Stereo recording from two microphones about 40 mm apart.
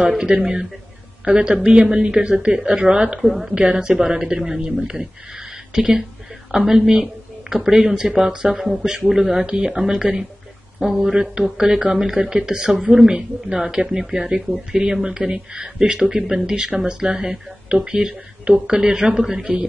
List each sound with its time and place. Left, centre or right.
0.2 s speech: centre
3.2 s a woman's voice: centre
3.5 s speech: right
5.7 s speech: centre
8.5 s a woman's voice: centre
8.8 s speech: centre
12.1 s speech: centre
15.8 s speech: centre